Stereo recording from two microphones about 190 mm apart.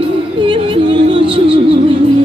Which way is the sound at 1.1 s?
25° right (ahead or behind).